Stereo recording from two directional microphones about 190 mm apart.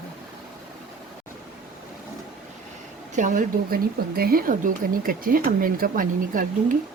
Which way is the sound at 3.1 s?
45° right (ahead or behind).